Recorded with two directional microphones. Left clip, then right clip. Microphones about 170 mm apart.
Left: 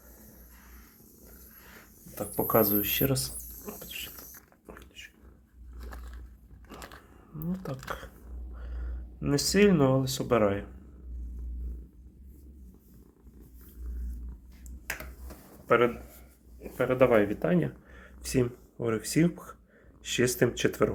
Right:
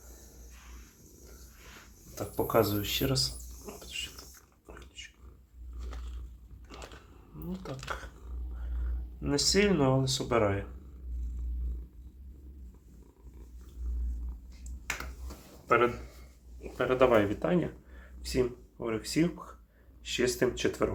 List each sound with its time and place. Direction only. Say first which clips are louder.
2.1 s speech: left 1 dB; 40° left (ahead or behind)
3.9 s rodents: right 2 dB; 40° left (ahead or behind)
7.7 s a sound: even; 15° left (ahead or behind)
9.2 s speech: left 3 dB; 35° left (ahead or behind)
16.7 s speech: left 1 dB; 30° left (ahead or behind); by 20.9 s 45° left (ahead or behind)